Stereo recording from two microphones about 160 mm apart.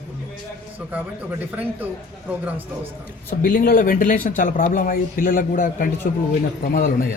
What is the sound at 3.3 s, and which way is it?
A man's voice, 60° left (ahead or behind).